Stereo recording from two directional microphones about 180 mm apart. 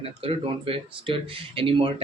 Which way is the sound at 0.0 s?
30° right (ahead or behind).